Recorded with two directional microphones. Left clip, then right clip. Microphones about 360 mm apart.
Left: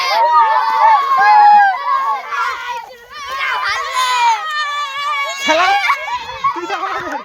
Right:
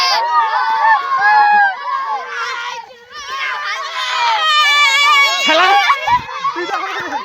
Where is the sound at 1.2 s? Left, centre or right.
Left.